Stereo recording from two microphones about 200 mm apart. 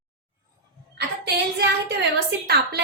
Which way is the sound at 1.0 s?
55° right (ahead or behind).